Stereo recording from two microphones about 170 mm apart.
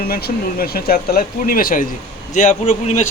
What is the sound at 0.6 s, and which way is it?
A man's voice, 60° left (ahead or behind).